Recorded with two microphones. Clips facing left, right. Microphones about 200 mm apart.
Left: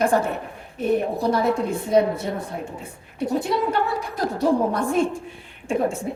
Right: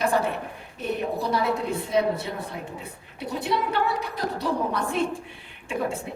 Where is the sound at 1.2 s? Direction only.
50° left (ahead or behind).